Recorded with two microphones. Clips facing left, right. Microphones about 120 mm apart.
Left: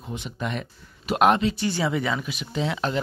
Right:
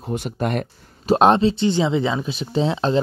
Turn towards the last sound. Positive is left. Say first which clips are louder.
# right 7 dB
turn(degrees=-30)  # may be behind; listen again after turning